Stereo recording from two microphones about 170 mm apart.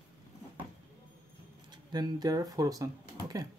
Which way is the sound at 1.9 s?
25° right (ahead or behind).